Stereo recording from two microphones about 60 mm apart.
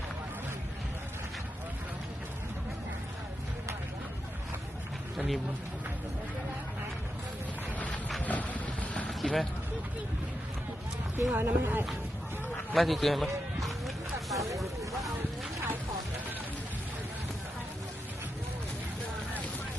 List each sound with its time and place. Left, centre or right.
5.1 s speech: centre
8.2 s vehicle: left
9.0 s basketball bounce: centre
11.3 s speech: right
12.7 s a sound: centre